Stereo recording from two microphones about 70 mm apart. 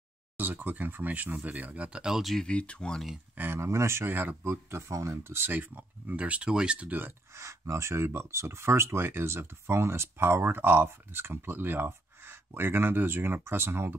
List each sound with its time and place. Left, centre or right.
0.4 s speech: right; by 2.3 s centre
2.3 s speech: centre
3.3 s speech: right
3.6 s speech: right
4.4 s speech: right; by 7.0 s centre
7.3 s speech: right